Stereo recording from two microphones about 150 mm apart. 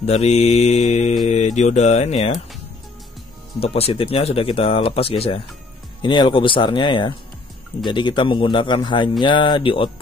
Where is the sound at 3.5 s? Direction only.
40° left (ahead or behind).